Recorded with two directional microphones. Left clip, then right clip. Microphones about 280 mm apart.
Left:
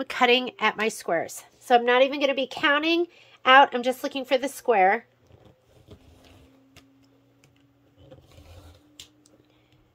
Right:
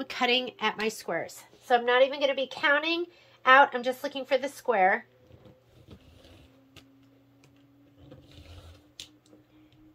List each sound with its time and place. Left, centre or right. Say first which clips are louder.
0.0 s a woman's voice: left 6 dB; centre; by 5.0 s left